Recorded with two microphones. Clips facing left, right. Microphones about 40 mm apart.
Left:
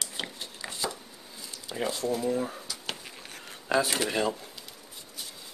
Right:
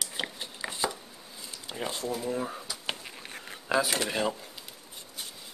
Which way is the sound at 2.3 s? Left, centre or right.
Centre.